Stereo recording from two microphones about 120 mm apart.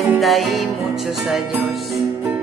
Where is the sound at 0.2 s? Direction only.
Centre (ahead or behind).